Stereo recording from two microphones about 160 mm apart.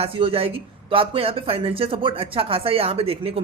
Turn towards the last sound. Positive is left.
turn(degrees=-35)  # may be behind; listen again after turning